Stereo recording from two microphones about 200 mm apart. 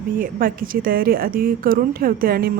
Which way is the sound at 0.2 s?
45° right (ahead or behind).